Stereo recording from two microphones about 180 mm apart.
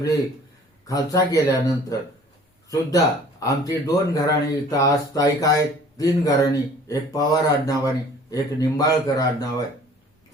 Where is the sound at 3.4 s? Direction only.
20° left (ahead or behind).